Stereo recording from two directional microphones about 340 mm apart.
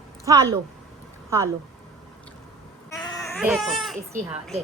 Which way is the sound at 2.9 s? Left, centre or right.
Centre.